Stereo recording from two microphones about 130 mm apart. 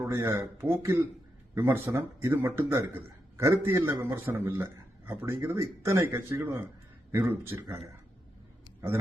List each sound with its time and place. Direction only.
0.0 s a man's voice: 20° right (ahead or behind)